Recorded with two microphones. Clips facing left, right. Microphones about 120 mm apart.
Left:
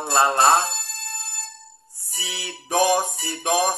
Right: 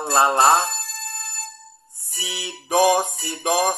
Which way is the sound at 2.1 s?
20° right (ahead or behind).